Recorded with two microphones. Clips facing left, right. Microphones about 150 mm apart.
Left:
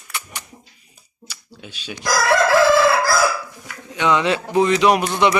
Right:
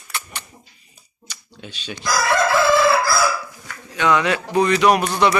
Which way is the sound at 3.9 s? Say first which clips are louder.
Even; 20° left (ahead or behind).